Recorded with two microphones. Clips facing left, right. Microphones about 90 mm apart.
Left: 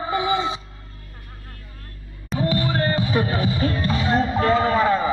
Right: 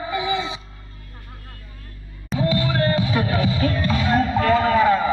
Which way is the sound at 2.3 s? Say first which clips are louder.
Right 1 dB; 30° left (ahead or behind).